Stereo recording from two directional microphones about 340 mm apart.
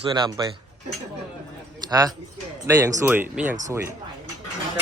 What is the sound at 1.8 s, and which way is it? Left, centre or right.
Speech, centre.